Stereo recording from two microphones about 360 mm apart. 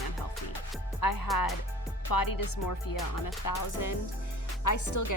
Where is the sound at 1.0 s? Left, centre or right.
Left.